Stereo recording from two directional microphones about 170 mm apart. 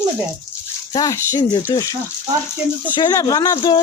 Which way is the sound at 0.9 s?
20° left (ahead or behind).